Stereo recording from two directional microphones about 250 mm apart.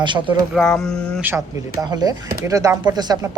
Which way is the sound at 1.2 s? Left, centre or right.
Centre.